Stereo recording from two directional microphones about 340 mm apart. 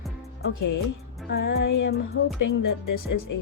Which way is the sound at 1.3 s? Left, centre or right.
Left.